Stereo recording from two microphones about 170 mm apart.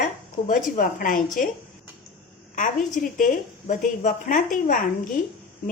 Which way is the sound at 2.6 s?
50° left (ahead or behind).